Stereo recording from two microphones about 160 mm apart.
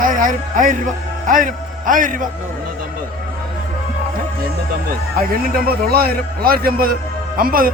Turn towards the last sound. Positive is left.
turn(degrees=-65)  # may be behind; listen again after turning